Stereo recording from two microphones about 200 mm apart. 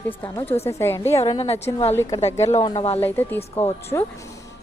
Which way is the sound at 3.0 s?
10° left (ahead or behind).